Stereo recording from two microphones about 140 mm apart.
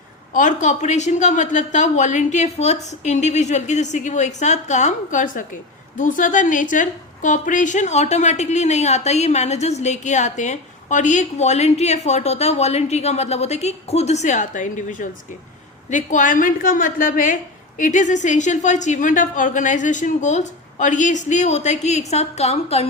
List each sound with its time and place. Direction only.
0.3 s a woman's voice: 60° left (ahead or behind)